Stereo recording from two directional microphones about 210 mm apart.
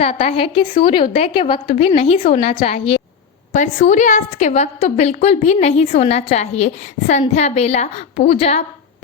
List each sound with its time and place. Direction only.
0.0 s a woman's voice: 30° left (ahead or behind)